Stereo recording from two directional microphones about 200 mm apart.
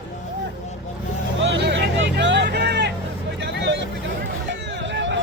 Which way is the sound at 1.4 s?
65° right (ahead or behind).